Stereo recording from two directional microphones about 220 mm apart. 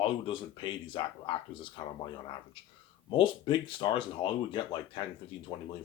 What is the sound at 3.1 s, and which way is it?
Speech, 20° left (ahead or behind).